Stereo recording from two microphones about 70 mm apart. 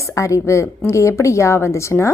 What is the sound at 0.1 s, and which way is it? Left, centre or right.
A woman's voice, left.